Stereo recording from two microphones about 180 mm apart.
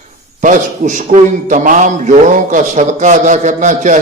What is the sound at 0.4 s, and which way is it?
A man's voice, 45° right (ahead or behind).